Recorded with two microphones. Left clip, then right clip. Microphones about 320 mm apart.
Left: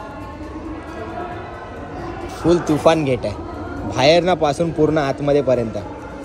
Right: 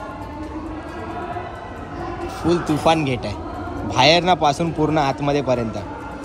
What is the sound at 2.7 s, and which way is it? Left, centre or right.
A man's voice, centre.